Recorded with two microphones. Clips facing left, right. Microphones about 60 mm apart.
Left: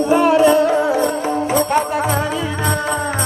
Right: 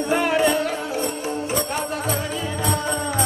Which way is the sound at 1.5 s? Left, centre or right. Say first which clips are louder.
Left 10 dB; left.